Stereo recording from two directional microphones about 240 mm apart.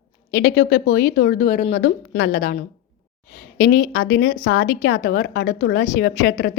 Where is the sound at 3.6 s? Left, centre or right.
Left.